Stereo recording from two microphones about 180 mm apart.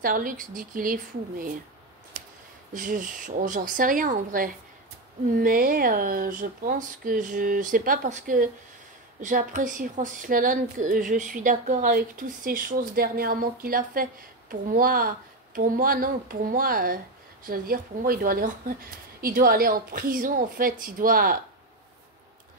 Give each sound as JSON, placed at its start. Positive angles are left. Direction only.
{"t": 0.0, "sound": "a woman's voice", "side_deg": -50}
{"t": 2.1, "sound": "a sound", "side_deg": -50}
{"t": 2.7, "sound": "a woman's voice", "side_deg": -50}